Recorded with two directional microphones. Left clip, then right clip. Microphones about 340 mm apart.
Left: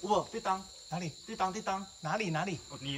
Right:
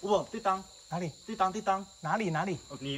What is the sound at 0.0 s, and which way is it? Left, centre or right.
Speech, centre.